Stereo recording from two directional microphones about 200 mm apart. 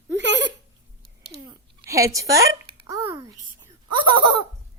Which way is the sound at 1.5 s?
15° right (ahead or behind).